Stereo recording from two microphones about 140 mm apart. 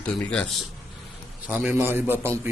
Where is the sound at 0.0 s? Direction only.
5° left (ahead or behind).